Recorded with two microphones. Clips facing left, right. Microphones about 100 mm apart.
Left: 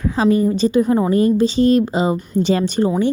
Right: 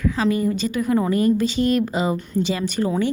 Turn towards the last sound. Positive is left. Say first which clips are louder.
# left 5 dB
turn(degrees=25)  # may be behind; listen again after turning